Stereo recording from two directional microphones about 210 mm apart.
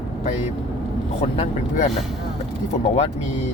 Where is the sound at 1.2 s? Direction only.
30° left (ahead or behind).